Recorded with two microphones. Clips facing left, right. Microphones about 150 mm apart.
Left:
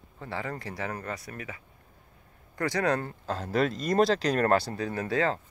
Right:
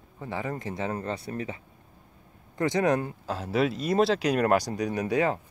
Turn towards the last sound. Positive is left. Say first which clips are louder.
# right 2 dB
turn(degrees=-15)  # may be behind; listen again after turning